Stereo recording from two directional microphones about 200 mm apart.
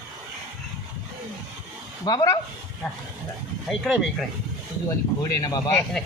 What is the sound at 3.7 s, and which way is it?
Speech, centre (ahead or behind).